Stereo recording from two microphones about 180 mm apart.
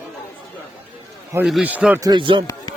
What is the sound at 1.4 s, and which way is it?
Speech, 5° right (ahead or behind).